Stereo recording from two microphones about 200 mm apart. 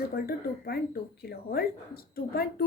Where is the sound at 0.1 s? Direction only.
50° left (ahead or behind).